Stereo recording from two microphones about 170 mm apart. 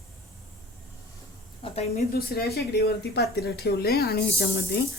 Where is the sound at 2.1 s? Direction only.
65° left (ahead or behind).